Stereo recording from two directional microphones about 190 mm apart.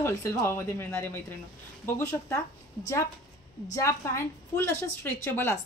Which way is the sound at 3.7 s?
15° left (ahead or behind).